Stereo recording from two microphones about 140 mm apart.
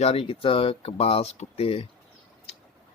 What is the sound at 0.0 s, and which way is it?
Speech, 45° left (ahead or behind).